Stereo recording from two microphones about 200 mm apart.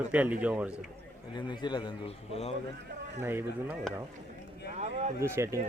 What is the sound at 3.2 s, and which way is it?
Speech, 10° right (ahead or behind).